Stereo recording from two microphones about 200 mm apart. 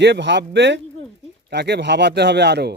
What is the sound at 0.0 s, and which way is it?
A man's voice, 60° right (ahead or behind).